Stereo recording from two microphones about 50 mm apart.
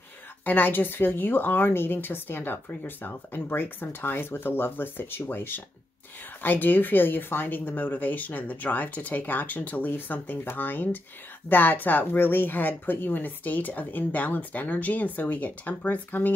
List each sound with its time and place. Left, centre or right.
0.5 s speech: left